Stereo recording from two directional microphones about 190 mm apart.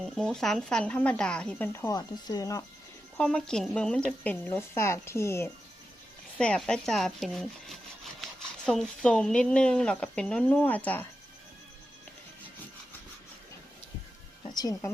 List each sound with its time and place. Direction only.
0.0 s speech: centre (ahead or behind); by 2.6 s 15° left (ahead or behind)
3.2 s speech: 5° left (ahead or behind)
14.5 s speech: 20° left (ahead or behind)